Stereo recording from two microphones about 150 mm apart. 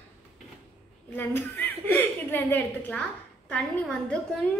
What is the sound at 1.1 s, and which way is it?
A woman's voice, 15° left (ahead or behind).